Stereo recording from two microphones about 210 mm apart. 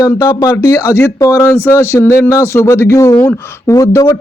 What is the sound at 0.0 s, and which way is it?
Speech, 15° left (ahead or behind).